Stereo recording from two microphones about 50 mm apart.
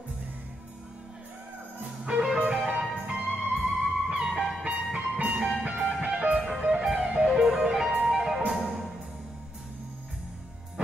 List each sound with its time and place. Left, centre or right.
2.1 s music: right
4.6 s music: right; by 8.8 s centre